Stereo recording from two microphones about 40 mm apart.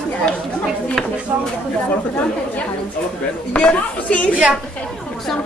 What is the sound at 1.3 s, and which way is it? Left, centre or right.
Speech, right.